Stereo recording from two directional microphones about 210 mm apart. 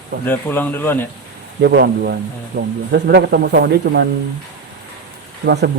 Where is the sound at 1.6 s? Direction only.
50° right (ahead or behind).